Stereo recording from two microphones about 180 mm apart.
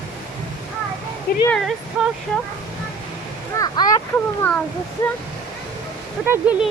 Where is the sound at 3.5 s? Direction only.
20° left (ahead or behind).